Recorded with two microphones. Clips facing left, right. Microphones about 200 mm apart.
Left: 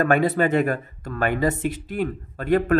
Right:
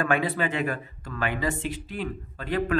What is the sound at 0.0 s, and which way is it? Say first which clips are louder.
Speech: left 6 dB; 45° left (ahead or behind).